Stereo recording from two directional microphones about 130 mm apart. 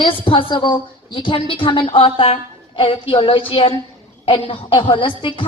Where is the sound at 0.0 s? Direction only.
40° left (ahead or behind).